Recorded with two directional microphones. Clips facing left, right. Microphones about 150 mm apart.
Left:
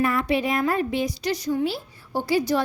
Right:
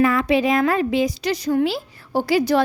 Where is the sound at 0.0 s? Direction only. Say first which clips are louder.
Right 5 dB; 90° right.